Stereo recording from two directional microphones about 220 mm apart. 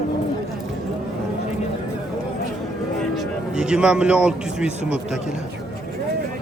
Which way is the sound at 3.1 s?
5° right (ahead or behind).